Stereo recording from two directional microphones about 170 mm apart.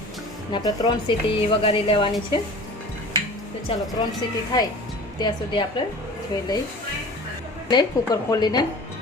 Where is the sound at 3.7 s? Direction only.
35° left (ahead or behind).